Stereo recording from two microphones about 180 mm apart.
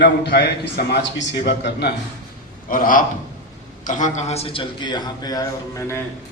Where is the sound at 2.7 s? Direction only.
50° left (ahead or behind); by 5.4 s 20° left (ahead or behind).